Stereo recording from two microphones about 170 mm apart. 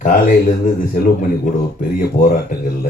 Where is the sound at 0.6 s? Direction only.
55° left (ahead or behind).